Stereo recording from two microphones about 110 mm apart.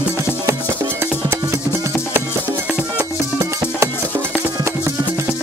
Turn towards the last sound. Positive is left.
turn(degrees=-30)  # may be behind; listen again after turning